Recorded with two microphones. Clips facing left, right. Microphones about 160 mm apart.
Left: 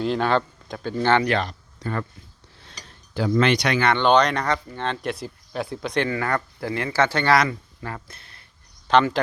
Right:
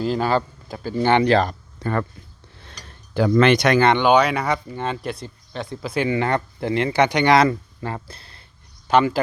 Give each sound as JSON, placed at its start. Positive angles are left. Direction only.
{"t": 0.0, "sound": "speech", "side_deg": -5}
{"t": 0.9, "sound": "speech", "side_deg": -15}
{"t": 1.2, "sound": "speech", "side_deg": -30}
{"t": 1.5, "sound": "a sound", "side_deg": -55}
{"t": 2.6, "sound": "cutlery", "side_deg": -55}
{"t": 3.9, "sound": "speech", "side_deg": -10}
{"t": 6.1, "sound": "speech", "side_deg": -20}
{"t": 7.3, "sound": "speech", "side_deg": -30}
{"t": 8.9, "sound": "speech", "side_deg": -10}